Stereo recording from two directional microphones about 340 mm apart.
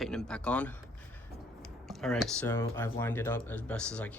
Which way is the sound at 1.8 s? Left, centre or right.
Centre.